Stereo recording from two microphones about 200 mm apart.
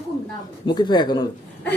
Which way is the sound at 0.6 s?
20° left (ahead or behind).